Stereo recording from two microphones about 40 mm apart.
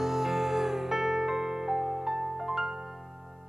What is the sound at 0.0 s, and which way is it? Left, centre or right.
Music, centre.